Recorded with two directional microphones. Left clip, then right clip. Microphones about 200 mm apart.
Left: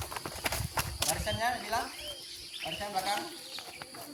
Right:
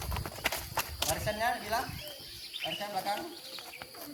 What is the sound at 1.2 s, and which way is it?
Speech, 10° right (ahead or behind).